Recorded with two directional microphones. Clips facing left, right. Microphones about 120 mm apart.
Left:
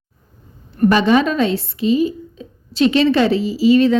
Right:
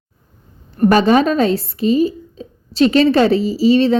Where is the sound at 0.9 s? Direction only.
40° right (ahead or behind).